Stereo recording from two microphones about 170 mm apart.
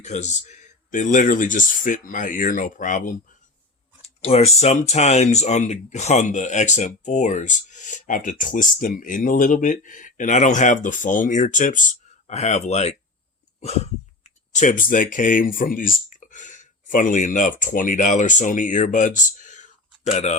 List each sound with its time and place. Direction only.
0.0 s speech: 45° left (ahead or behind)
4.2 s speech: 40° left (ahead or behind)
13.6 s a sound: 40° left (ahead or behind)
14.3 s speech: 45° left (ahead or behind)